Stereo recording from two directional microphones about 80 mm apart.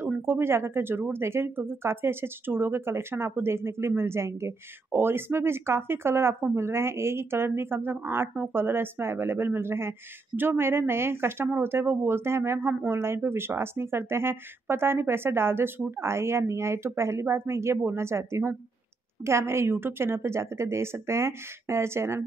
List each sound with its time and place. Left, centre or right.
0.2 s speech: right